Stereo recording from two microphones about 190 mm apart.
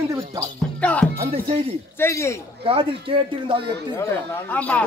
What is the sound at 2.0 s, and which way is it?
Speech, 15° left (ahead or behind).